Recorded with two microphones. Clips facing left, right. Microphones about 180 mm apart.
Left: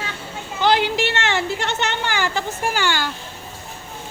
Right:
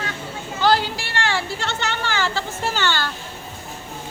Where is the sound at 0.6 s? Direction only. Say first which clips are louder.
Left 2 dB; 20° left (ahead or behind).